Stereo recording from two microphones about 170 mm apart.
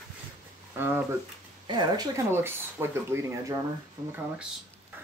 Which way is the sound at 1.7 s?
25° right (ahead or behind).